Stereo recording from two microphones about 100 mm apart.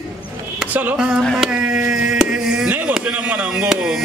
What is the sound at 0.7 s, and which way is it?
Speech, 15° right (ahead or behind).